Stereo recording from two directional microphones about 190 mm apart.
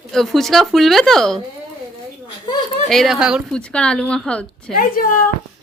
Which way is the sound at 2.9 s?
Centre (ahead or behind).